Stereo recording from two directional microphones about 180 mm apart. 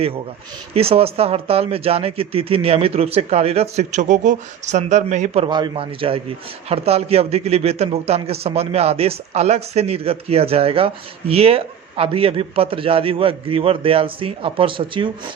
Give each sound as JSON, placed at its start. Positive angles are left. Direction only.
{"t": 0.7, "sound": "a man's voice", "side_deg": -35}